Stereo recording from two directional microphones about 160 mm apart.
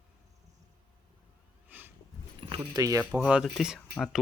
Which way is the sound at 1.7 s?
10° right (ahead or behind).